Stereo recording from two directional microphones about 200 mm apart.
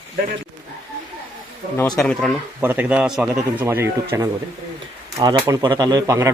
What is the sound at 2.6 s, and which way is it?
Speech, 10° right (ahead or behind).